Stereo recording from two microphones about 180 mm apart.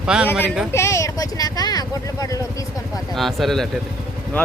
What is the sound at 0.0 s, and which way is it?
Speech, 5° right (ahead or behind).